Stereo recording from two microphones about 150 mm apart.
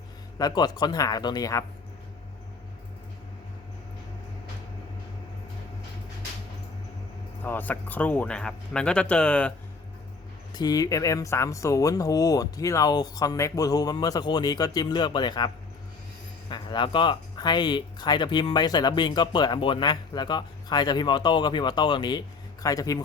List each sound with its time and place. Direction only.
0.3 s speech: 25° left (ahead or behind)
7.4 s speech: 10° left (ahead or behind)
10.5 s speech: 25° left (ahead or behind)